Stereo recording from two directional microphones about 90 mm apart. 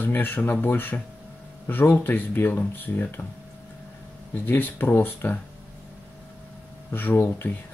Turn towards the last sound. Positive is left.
turn(degrees=25)  # may be behind; listen again after turning